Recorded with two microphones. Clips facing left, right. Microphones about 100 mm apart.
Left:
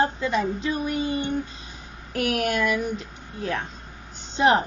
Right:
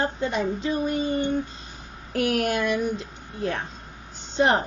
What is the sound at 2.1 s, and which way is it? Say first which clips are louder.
A woman's voice: right 1 dB; 40° right (ahead or behind).